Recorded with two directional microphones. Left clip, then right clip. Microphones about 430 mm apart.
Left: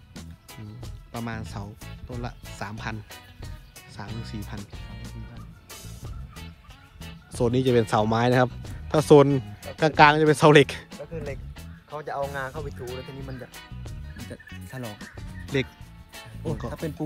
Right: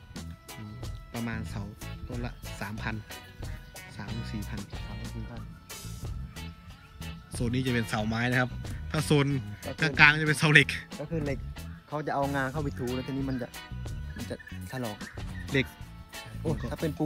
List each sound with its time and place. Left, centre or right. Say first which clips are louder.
0.1 s music: even; centre
1.1 s speech: left 3 dB; centre
3.9 s music: left 3 dB; centre
7.0 s speech: left 11 dB; centre
12.0 s music: even; centre
12.8 s music: right 3 dB; centre
16.2 s speech: left 1 dB; centre